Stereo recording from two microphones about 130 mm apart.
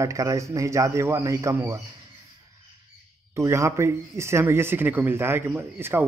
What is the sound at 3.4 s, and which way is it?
Speech, 20° right (ahead or behind).